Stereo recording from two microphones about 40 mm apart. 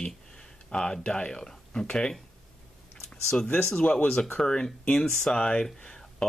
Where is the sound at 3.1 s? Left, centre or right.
Centre.